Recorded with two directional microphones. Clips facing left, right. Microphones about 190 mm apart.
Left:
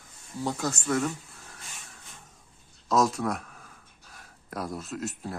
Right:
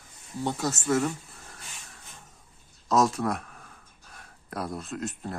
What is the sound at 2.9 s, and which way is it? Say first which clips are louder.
Speech: right 1 dB; centre (ahead or behind).